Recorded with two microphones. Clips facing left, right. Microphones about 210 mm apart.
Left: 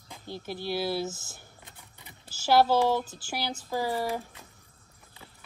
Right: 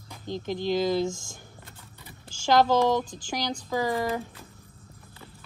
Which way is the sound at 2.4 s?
10° left (ahead or behind).